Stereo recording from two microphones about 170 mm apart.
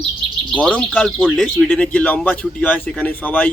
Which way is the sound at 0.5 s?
5° left (ahead or behind).